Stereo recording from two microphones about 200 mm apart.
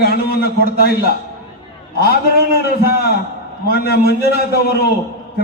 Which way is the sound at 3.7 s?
50° left (ahead or behind).